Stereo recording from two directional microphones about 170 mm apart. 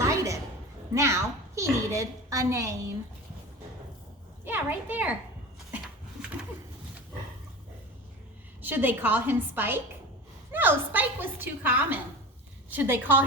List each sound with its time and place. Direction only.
0.0 s a sound: 20° right (ahead or behind)
0.9 s a woman's voice: 15° right (ahead or behind)
4.4 s a woman's voice: 10° right (ahead or behind)
8.6 s a woman's voice: 10° right (ahead or behind)